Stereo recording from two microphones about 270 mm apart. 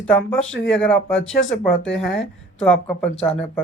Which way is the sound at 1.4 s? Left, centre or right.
Left.